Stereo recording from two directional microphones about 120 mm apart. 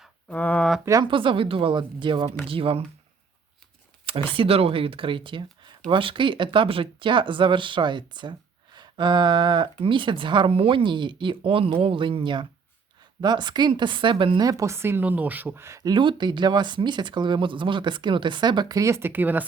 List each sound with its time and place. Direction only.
0.3 s speech: 10° left (ahead or behind)
1.0 s speech: 45° right (ahead or behind)
4.0 s a sound: 45° right (ahead or behind)
4.4 s speech: 50° right (ahead or behind)
14.4 s speech: 25° right (ahead or behind)
15.8 s speech: 40° right (ahead or behind); by 19.5 s 15° right (ahead or behind)